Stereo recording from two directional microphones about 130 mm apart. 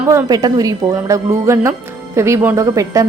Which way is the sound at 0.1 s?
25° right (ahead or behind).